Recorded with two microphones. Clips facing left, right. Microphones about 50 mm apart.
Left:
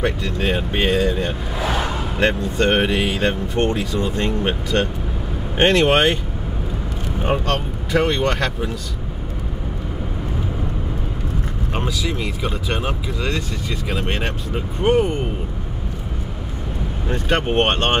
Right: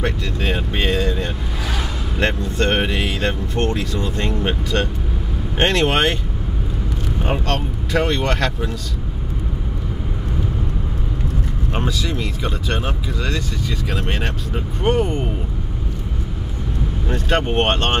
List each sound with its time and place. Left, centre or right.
0.2 s speech: centre
4.1 s speech: left
7.2 s speech: centre
11.7 s speech: centre
14.8 s speech: centre
17.1 s speech: centre